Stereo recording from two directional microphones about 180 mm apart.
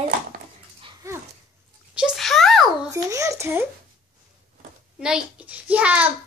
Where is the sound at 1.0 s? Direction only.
15° right (ahead or behind).